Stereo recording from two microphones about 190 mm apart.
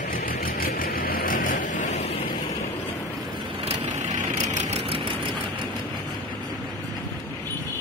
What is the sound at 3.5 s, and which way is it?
Vehicle, 35° right (ahead or behind).